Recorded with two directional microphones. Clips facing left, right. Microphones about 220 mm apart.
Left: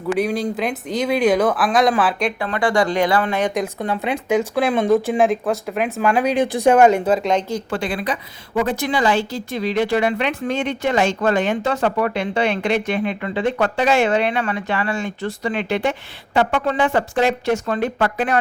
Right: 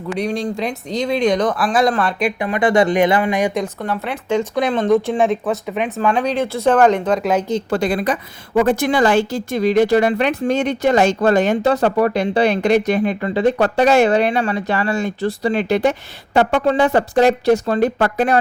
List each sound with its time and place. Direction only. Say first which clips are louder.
0.2 s speech: right 3 dB; 5° left (ahead or behind)
2.4 s speech: right 4 dB; 20° right (ahead or behind)
3.8 s speech: left 1 dB; 15° left (ahead or behind)
7.7 s a woman's voice: right 6 dB; 40° right (ahead or behind)